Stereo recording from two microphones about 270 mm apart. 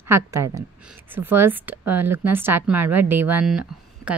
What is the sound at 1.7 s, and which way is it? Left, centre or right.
Speech, right.